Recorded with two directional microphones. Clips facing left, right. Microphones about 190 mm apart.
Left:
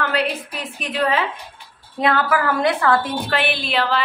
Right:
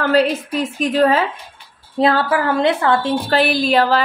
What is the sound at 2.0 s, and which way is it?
A woman's voice, 30° right (ahead or behind).